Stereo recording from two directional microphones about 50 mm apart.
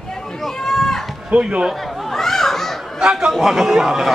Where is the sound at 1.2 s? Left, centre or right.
Right.